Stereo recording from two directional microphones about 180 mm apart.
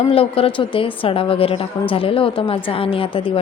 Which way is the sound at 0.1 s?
30° left (ahead or behind).